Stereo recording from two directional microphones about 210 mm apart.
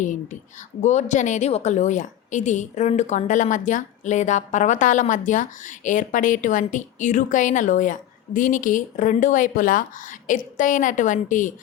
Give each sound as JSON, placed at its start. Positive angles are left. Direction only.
{"t": 0.0, "sound": "a woman's voice", "side_deg": 35}